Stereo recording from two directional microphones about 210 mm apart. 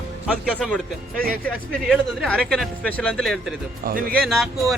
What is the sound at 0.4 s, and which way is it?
Speech, 5° left (ahead or behind).